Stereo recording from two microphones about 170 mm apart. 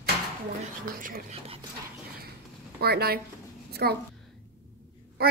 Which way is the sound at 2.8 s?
65° right (ahead or behind).